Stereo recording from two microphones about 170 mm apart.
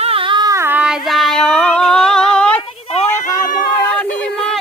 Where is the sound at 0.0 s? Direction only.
35° right (ahead or behind); by 2.6 s 5° left (ahead or behind).